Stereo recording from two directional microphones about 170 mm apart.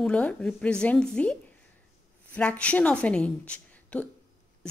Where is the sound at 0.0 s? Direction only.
5° left (ahead or behind).